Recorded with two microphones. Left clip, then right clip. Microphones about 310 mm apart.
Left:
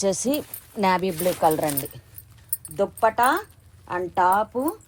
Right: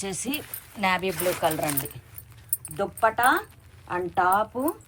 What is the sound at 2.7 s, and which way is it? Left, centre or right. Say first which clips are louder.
A woman's voice: left 3 dB; centre.